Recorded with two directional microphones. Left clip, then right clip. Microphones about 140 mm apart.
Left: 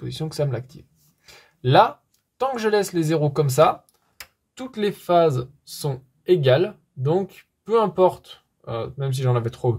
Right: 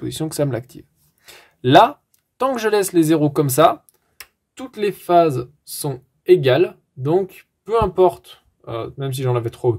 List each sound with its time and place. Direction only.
0.0 s speech: 40° right (ahead or behind)
4.6 s speech: 20° right (ahead or behind)